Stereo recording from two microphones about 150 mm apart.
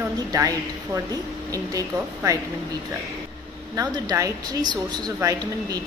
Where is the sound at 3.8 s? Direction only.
25° right (ahead or behind).